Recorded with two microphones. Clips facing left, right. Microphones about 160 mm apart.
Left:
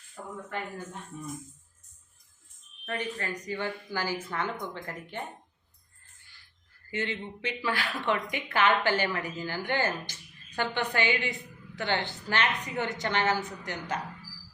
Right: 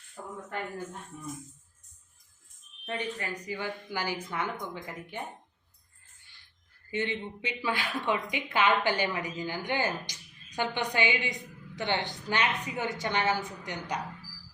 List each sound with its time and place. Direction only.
2.8 s a woman's voice: 15° right (ahead or behind)
6.9 s a woman's voice: 15° right (ahead or behind)